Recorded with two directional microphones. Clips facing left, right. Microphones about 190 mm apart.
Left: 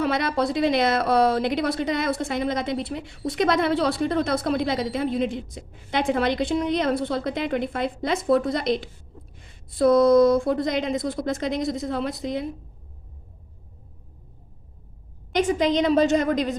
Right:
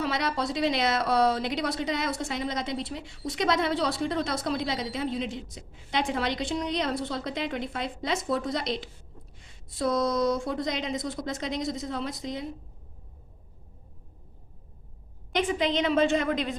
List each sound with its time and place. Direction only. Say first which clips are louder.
0.0 s a woman's voice: left 6 dB; 55° left (ahead or behind)
15.4 s a woman's voice: left 5 dB; 40° left (ahead or behind)